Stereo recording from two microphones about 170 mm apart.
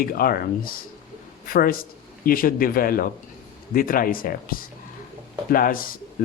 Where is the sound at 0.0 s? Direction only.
60° left (ahead or behind).